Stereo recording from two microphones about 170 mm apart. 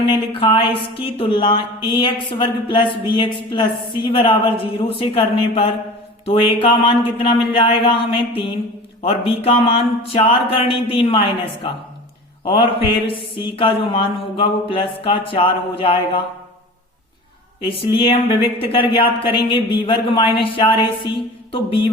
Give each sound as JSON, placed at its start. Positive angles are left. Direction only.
{"t": 0.1, "sound": "speech", "side_deg": 30}
{"t": 4.8, "sound": "mantra", "side_deg": 35}
{"t": 17.6, "sound": "mantra", "side_deg": 30}